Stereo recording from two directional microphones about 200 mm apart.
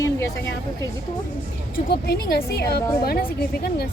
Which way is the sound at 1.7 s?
50° left (ahead or behind).